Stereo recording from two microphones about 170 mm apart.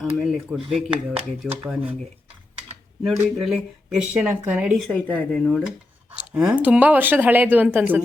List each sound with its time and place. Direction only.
0.2 s speech: 5° right (ahead or behind)
3.0 s speech: centre (ahead or behind)
4.9 s speech: 10° left (ahead or behind); by 8.0 s 10° right (ahead or behind)